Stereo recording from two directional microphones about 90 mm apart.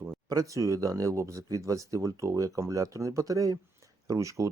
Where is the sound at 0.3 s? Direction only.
40° right (ahead or behind).